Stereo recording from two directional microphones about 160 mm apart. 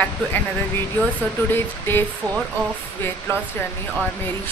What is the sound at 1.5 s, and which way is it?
Speech, 15° left (ahead or behind).